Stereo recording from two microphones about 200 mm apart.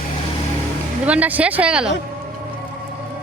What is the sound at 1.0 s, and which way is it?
Speech, 5° right (ahead or behind).